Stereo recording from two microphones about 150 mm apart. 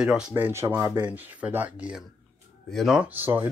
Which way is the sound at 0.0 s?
5° right (ahead or behind).